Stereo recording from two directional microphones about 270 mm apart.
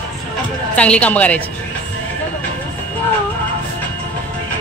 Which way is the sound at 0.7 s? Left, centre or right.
Centre.